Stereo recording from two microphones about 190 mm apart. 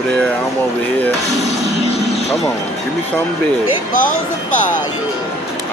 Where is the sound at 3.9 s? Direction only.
45° left (ahead or behind).